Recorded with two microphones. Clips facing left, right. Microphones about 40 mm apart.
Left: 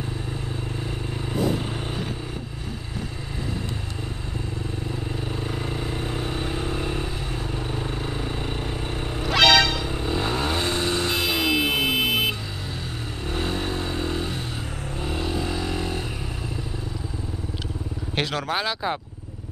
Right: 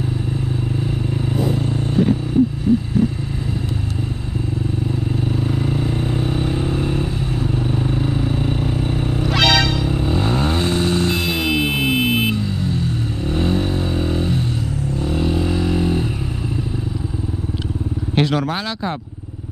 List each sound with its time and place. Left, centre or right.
2.0 s vehicle: centre
5.3 s vehicle: centre
15.0 s a sound: centre
18.1 s speech: centre